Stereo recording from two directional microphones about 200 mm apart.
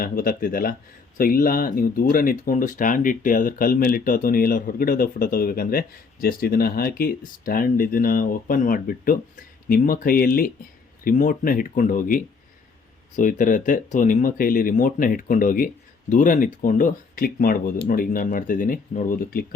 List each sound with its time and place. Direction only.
0.0 s speech: 45° left (ahead or behind)